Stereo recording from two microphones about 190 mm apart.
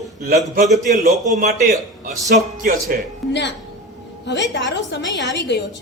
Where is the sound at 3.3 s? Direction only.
65° left (ahead or behind).